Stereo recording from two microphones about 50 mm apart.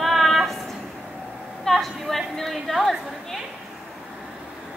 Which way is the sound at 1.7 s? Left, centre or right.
Centre.